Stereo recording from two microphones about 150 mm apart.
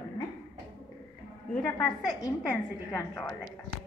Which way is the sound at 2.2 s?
20° left (ahead or behind).